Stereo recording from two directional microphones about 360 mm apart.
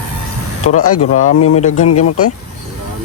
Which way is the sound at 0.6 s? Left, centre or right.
Left.